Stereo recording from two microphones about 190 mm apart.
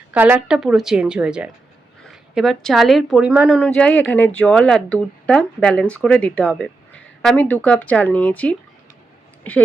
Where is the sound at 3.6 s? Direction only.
5° left (ahead or behind).